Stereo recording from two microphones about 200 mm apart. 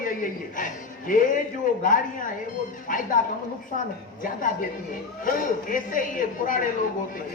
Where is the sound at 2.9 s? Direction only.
40° left (ahead or behind).